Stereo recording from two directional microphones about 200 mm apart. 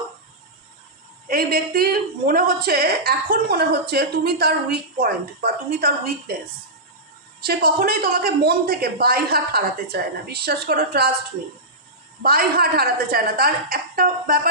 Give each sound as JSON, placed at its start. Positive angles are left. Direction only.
{"t": 1.3, "sound": "a woman's voice", "side_deg": -50}
{"t": 7.4, "sound": "a woman's voice", "side_deg": -50}
{"t": 12.2, "sound": "a woman's voice", "side_deg": -50}